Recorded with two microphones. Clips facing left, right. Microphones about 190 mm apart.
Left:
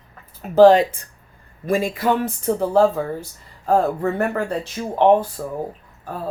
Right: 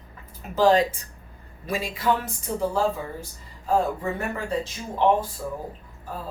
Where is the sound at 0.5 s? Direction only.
65° left (ahead or behind).